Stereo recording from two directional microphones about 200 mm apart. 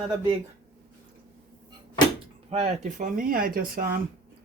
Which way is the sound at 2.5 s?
35° right (ahead or behind).